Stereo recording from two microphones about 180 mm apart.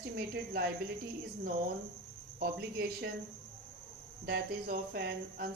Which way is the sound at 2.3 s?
60° right (ahead or behind).